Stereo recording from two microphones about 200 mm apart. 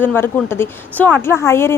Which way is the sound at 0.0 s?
10° left (ahead or behind).